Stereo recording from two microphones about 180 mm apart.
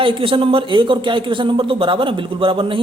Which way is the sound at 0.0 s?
30° right (ahead or behind).